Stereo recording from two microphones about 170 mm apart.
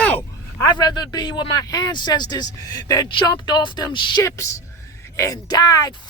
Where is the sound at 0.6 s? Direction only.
25° left (ahead or behind).